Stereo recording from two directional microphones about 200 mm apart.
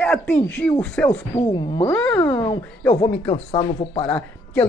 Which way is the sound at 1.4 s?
20° left (ahead or behind).